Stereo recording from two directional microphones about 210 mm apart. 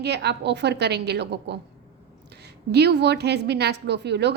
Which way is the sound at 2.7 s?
50° right (ahead or behind).